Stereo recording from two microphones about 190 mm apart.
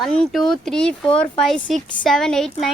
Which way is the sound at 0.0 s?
Centre (ahead or behind).